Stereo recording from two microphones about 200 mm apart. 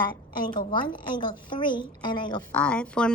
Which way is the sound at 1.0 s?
25° left (ahead or behind).